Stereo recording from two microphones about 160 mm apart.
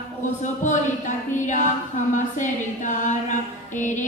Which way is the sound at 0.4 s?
50° left (ahead or behind).